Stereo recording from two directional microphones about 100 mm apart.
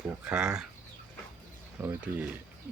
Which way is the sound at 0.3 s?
10° right (ahead or behind).